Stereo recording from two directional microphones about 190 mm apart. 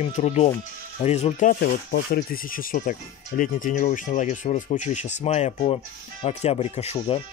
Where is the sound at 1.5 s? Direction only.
55° left (ahead or behind); by 7.2 s 30° left (ahead or behind).